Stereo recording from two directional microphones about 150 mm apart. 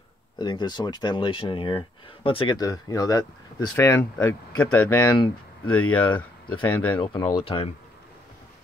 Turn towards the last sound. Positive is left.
turn(degrees=40)  # may be behind; listen again after turning